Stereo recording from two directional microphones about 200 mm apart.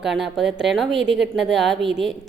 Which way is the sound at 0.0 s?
Centre (ahead or behind).